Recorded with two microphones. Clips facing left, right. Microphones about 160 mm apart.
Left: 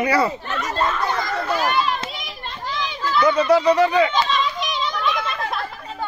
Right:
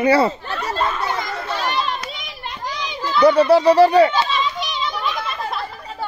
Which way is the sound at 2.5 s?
15° right (ahead or behind).